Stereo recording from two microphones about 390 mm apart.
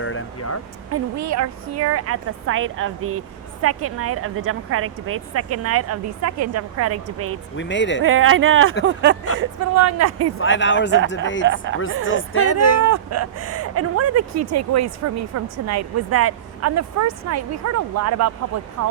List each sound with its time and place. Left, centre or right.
0.0 s speech: left
0.9 s a woman's voice: right
7.5 s speech: left
8.0 s a woman's voice: right
8.8 s a sound: right
9.4 s a woman's voice: right
10.4 s speech: left
11.4 s a sound: right
12.0 s speech: left
12.8 s a woman's voice: right